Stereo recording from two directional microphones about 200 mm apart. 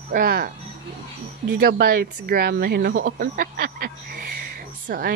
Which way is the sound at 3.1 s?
45° right (ahead or behind).